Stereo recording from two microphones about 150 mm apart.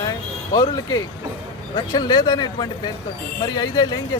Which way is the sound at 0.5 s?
25° left (ahead or behind).